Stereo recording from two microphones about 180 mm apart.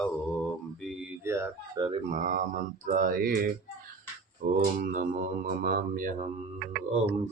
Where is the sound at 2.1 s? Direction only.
45° right (ahead or behind).